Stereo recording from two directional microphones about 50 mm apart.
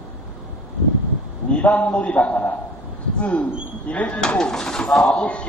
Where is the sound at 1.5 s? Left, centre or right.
Left.